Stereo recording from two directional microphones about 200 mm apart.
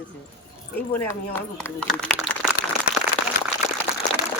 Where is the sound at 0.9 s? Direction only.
10° left (ahead or behind).